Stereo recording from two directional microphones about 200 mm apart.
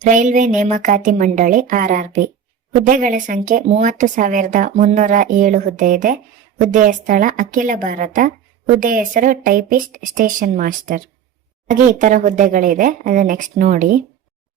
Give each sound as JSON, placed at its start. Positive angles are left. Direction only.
{"t": 0.0, "sound": "a woman's voice", "side_deg": -40}